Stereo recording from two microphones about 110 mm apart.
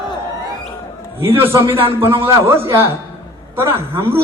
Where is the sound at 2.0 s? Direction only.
25° right (ahead or behind).